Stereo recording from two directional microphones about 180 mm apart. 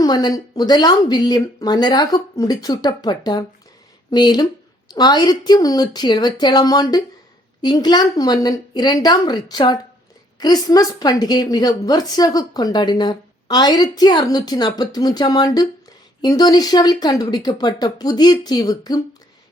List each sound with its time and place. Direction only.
0.0 s a woman's voice: 20° left (ahead or behind)